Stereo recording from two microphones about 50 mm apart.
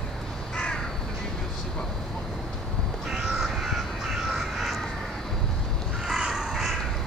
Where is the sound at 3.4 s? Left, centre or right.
Centre.